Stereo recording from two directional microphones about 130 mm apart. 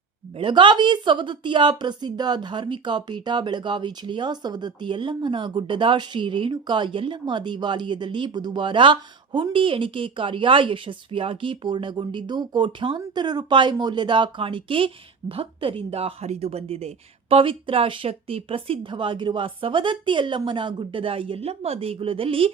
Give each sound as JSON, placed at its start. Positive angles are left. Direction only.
{"t": 0.3, "sound": "a woman's voice", "side_deg": -40}